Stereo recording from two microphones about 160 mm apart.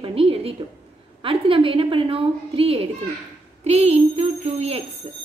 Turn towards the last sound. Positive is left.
turn(degrees=-40)  # may be behind; listen again after turning